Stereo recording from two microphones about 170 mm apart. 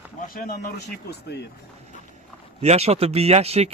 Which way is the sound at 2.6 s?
40° right (ahead or behind).